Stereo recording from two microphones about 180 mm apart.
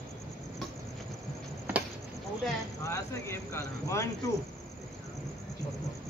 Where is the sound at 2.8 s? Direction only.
15° left (ahead or behind).